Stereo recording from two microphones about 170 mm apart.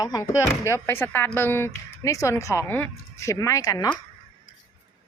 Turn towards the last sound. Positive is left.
turn(degrees=20)  # may be behind; listen again after turning